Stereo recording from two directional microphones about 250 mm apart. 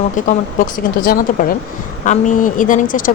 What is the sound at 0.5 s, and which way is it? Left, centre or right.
A woman's voice, left.